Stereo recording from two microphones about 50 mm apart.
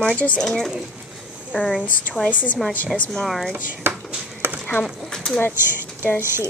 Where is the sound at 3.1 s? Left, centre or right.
Centre.